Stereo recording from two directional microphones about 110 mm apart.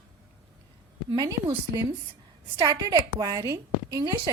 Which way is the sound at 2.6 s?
40° right (ahead or behind).